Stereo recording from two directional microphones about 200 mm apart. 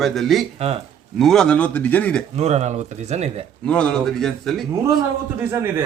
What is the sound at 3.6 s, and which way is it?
Speech, 5° left (ahead or behind).